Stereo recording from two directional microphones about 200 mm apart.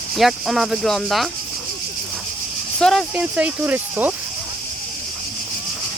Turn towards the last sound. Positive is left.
turn(degrees=-10)  # may be behind; listen again after turning